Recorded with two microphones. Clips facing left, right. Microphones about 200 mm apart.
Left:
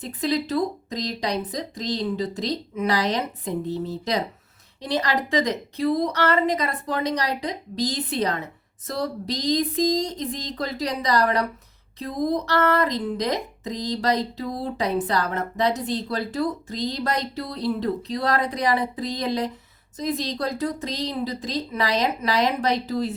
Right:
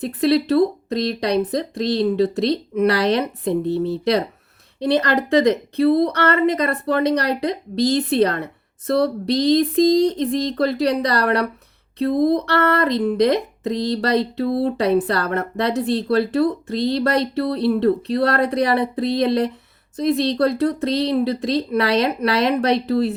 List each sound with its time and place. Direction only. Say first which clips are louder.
0.0 s speech: right 7 dB; 65° right (ahead or behind)